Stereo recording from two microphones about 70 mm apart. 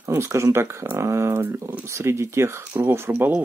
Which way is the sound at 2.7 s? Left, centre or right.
Right.